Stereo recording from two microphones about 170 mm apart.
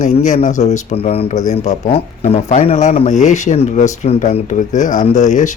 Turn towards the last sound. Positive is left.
turn(degrees=45)  # may be behind; listen again after turning